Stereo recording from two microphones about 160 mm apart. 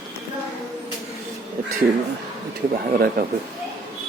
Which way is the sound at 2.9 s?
70° right (ahead or behind).